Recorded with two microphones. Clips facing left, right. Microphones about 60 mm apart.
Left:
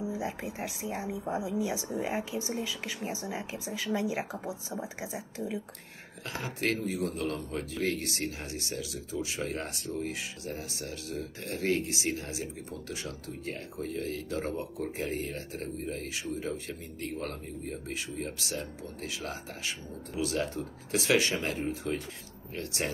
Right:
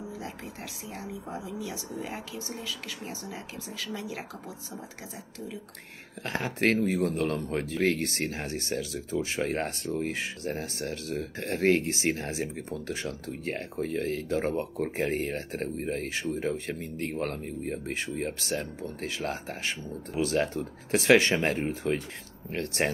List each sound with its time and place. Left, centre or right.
0.1 s speech: centre
6.2 s speech: right